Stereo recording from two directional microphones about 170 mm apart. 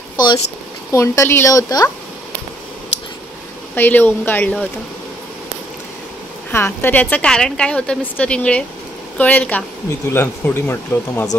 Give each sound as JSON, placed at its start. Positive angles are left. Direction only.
{"t": 0.9, "sound": "a woman's voice", "side_deg": 15}
{"t": 3.7, "sound": "a woman's voice", "side_deg": 10}
{"t": 6.5, "sound": "a woman's voice", "side_deg": 15}